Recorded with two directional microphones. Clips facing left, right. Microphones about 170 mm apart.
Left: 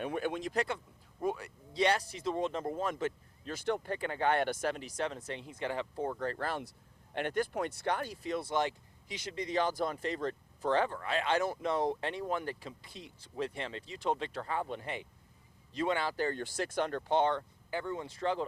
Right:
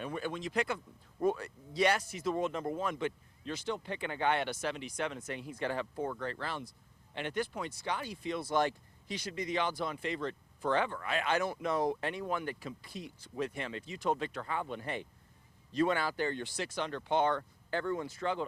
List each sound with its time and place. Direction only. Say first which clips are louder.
0.0 s speech: left 3 dB; 55° left (ahead or behind)
0.5 s speech: right 3 dB; 35° left (ahead or behind)
1.2 s a sound: right 3 dB; 15° left (ahead or behind)
1.7 s speech: even; 30° left (ahead or behind)
6.0 s speech: left 2 dB; 35° left (ahead or behind)
8.4 s speech: right 5 dB; 20° left (ahead or behind)
9.3 s speech: left 2 dB; 35° left (ahead or behind)
15.7 s speech: right 2 dB; 20° left (ahead or behind)
16.1 s speech: left 1 dB; 40° left (ahead or behind)
17.7 s speech: right 3 dB; 15° left (ahead or behind); by 18.4 s 30° left (ahead or behind)